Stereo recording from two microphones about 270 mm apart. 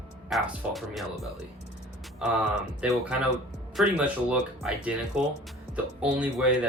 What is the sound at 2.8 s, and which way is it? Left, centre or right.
Speech, centre.